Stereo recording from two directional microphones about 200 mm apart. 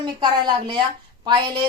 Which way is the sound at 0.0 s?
20° right (ahead or behind).